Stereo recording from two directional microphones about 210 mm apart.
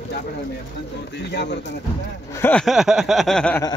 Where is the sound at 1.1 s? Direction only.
55° left (ahead or behind).